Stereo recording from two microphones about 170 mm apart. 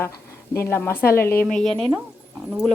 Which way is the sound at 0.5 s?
15° left (ahead or behind).